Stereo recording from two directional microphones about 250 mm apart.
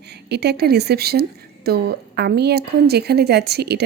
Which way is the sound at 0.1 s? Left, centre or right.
Right.